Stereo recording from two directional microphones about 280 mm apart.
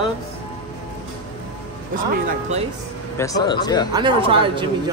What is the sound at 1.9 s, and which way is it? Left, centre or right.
Speech, right.